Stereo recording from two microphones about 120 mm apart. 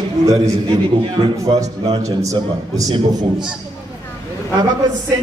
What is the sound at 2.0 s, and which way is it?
Speech, 30° right (ahead or behind).